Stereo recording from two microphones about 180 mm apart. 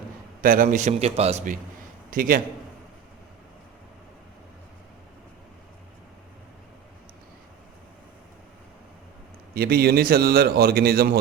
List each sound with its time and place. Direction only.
0.4 s a man's voice: 50° right (ahead or behind)
2.0 s a man's voice: 50° right (ahead or behind)
9.6 s a man's voice: 60° right (ahead or behind)